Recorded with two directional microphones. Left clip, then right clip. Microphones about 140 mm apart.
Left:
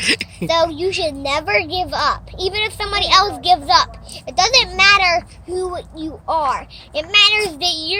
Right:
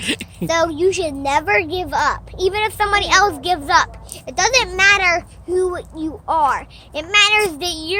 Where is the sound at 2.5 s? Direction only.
50° right (ahead or behind).